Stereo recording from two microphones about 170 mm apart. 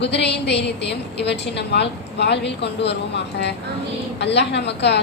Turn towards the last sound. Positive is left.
turn(degrees=90)